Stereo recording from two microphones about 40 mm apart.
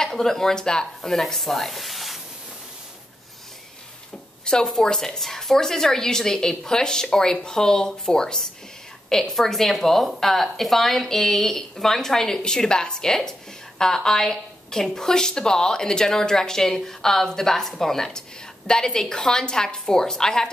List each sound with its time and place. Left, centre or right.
0.0 s a woman's voice: centre
1.2 s speech: centre
4.5 s a woman's voice: centre
9.3 s a woman's voice: centre